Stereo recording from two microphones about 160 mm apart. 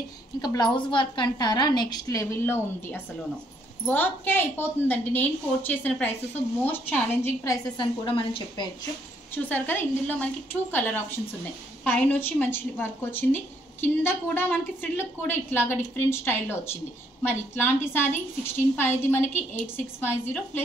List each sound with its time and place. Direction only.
0.4 s a woman's voice: 25° left (ahead or behind)
7.7 s a woman's voice: 30° left (ahead or behind)
9.3 s a woman's voice: 10° left (ahead or behind)